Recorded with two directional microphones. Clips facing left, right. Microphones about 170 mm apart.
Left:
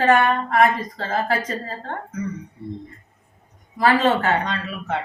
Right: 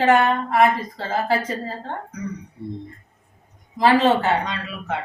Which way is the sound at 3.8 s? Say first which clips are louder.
Right 1 dB; 15° right (ahead or behind).